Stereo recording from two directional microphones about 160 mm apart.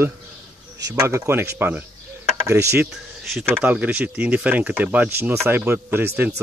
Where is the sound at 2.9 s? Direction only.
Centre (ahead or behind).